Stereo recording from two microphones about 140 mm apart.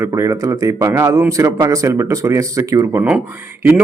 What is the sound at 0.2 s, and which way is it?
A man's voice, 25° right (ahead or behind).